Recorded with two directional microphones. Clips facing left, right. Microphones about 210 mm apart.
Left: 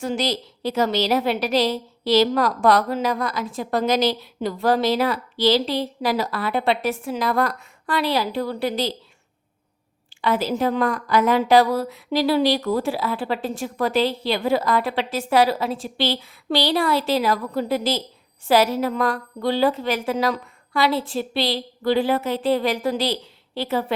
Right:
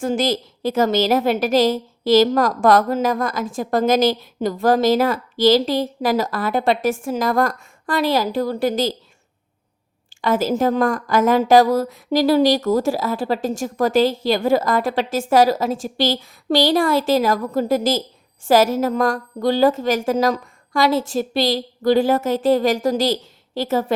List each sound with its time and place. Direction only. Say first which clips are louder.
0.0 s a woman's voice: right 4 dB; 50° right (ahead or behind)
10.2 s a woman's voice: right 3 dB; 45° right (ahead or behind)